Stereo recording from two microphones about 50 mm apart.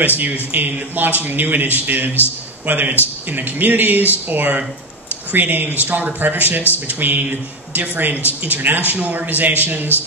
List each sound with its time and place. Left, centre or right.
0.2 s speech: right